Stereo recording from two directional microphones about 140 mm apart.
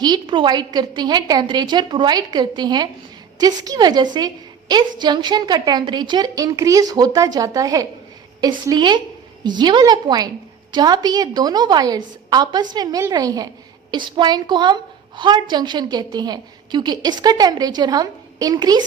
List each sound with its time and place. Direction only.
0.0 s a woman's voice: 30° right (ahead or behind)